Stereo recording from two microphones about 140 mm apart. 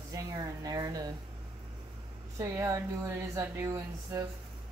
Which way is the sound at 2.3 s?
25° right (ahead or behind).